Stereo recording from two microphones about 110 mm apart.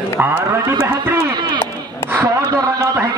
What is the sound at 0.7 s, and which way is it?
Speech, 35° right (ahead or behind).